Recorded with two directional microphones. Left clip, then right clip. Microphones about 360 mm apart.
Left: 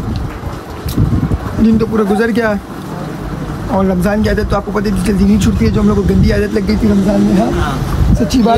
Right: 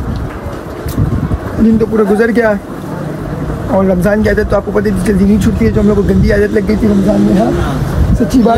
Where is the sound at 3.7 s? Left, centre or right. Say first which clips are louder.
Right 3 dB; centre.